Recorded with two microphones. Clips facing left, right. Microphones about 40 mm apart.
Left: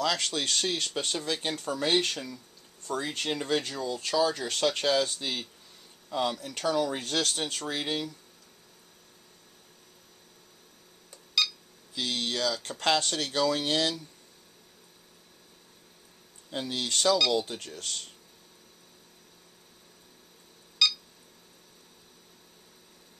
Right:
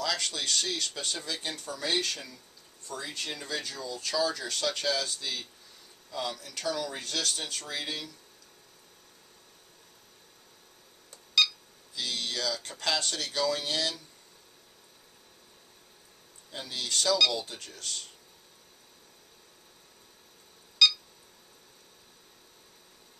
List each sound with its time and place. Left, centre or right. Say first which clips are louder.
0.0 s speech: left 3 dB; left
2.9 s speech: left 6 dB; left
11.9 s speech: left 3 dB; left
13.1 s speech: left 3 dB; left
16.4 s speech: left 4 dB; left
20.8 s beep: right 3 dB; centre